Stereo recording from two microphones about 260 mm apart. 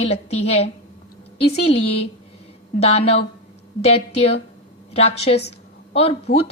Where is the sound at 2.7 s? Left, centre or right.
Left.